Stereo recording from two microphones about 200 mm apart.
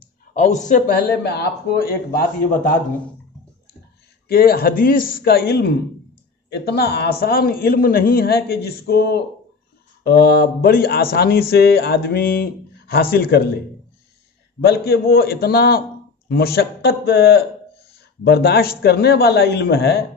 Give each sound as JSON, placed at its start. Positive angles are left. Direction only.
{"t": 0.3, "sound": "speech", "side_deg": 35}
{"t": 4.3, "sound": "speech", "side_deg": 50}
{"t": 14.6, "sound": "a man's voice", "side_deg": 55}